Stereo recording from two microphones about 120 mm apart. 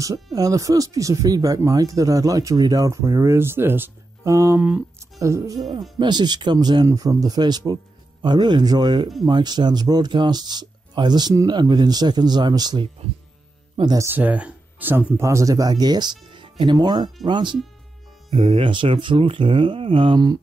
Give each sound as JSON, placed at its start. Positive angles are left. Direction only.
{"t": 0.0, "sound": "speech", "side_deg": -30}
{"t": 4.6, "sound": "speech", "side_deg": -10}
{"t": 5.2, "sound": "speech", "side_deg": -25}
{"t": 5.9, "sound": "speech", "side_deg": -35}
{"t": 14.1, "sound": "speech", "side_deg": -15}
{"t": 16.3, "sound": "music", "side_deg": -45}
{"t": 16.7, "sound": "speech", "side_deg": -35}